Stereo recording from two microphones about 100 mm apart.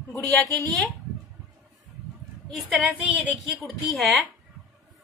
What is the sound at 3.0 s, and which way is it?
Speech, 15° right (ahead or behind).